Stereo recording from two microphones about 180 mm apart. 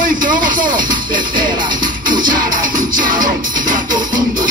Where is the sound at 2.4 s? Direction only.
50° right (ahead or behind).